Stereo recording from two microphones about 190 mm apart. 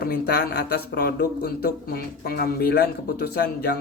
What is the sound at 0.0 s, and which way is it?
Speech, 60° left (ahead or behind).